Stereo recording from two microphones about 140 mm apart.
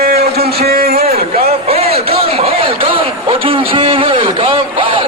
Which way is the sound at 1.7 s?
45° right (ahead or behind).